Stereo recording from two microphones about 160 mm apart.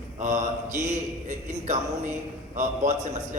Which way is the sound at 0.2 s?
50° right (ahead or behind).